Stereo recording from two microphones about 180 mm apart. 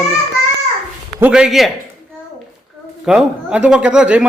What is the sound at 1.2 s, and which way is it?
Speech, 5° right (ahead or behind).